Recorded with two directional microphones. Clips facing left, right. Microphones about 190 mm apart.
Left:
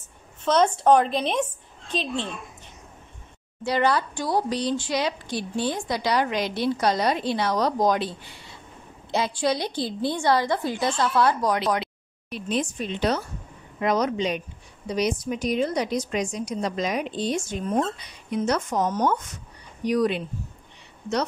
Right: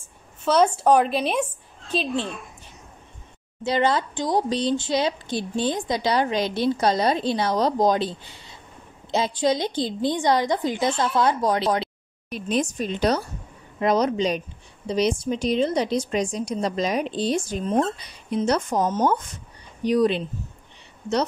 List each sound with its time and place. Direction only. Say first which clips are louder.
0.5 s a woman's voice: right 1 dB; 10° right (ahead or behind)
3.6 s speech: right 1 dB; 20° right (ahead or behind)
9.1 s speech: right 2 dB; 20° right (ahead or behind)
12.3 s a woman's voice: right 2 dB; 45° right (ahead or behind); by 20.2 s 30° right (ahead or behind)